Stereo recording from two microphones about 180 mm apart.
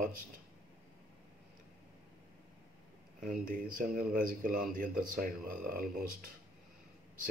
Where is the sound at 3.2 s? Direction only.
50° right (ahead or behind).